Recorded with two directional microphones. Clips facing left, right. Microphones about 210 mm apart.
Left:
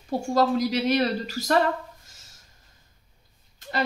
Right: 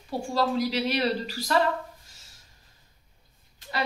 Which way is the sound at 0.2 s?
45° left (ahead or behind).